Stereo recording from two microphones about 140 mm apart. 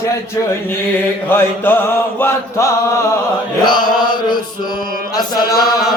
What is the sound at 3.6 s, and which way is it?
Chant, 30° left (ahead or behind).